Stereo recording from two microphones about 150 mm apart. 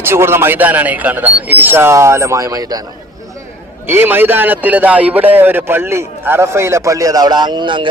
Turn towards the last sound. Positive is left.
turn(degrees=-30)  # may be behind; listen again after turning